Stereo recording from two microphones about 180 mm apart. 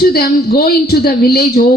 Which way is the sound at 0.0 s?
60° left (ahead or behind).